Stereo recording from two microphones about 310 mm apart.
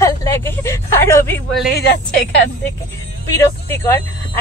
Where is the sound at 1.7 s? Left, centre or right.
Left.